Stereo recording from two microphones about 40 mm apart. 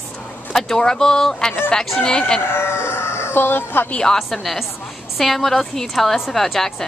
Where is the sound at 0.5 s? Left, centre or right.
Centre.